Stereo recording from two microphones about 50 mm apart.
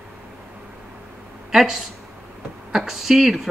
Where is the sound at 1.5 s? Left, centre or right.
Centre.